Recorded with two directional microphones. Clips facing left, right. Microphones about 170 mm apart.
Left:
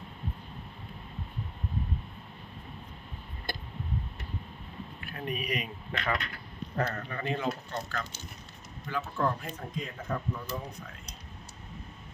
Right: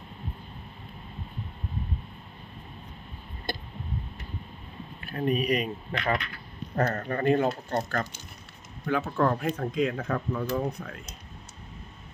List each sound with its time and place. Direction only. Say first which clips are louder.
3.5 s a sound: right 4 dB; 25° right (ahead or behind)
4.9 s speech: right 9 dB; 35° right (ahead or behind)
6.7 s speech: right 6 dB; 45° right (ahead or behind)
8.9 s speech: right 6 dB; 60° right (ahead or behind)